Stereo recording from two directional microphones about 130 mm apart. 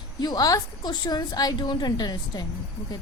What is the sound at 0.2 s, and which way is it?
A woman's voice, 30° left (ahead or behind).